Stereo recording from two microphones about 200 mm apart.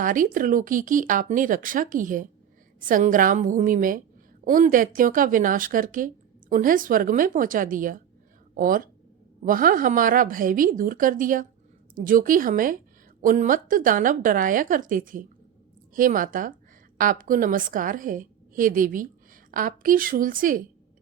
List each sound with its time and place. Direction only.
0.0 s a woman's voice: 40° right (ahead or behind)